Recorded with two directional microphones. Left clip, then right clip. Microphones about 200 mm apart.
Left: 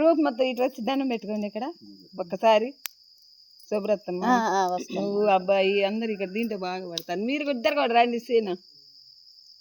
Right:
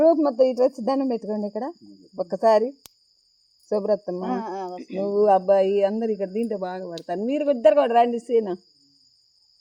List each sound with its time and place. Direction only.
0.0 s speech: 5° left (ahead or behind)
0.3 s speech: 10° right (ahead or behind)
4.4 s speech: 45° left (ahead or behind)
4.9 s speech: 10° right (ahead or behind)